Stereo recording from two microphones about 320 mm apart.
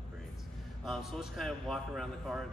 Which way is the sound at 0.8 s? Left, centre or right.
Centre.